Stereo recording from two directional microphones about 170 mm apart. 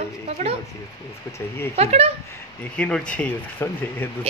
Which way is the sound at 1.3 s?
15° left (ahead or behind).